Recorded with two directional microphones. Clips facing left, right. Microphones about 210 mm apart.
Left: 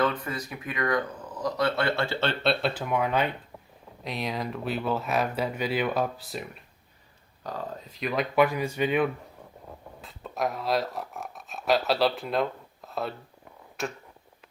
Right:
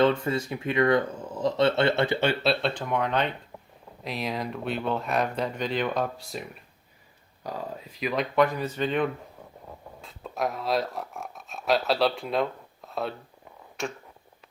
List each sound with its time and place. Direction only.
0.0 s speech: 25° right (ahead or behind)
2.4 s speech: centre (ahead or behind)
7.4 s speech: 10° right (ahead or behind)
7.9 s speech: centre (ahead or behind)